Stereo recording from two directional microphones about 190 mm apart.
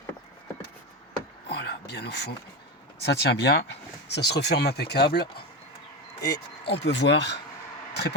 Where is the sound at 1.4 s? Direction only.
60° left (ahead or behind).